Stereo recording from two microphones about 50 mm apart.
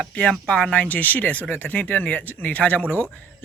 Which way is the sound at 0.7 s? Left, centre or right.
Left.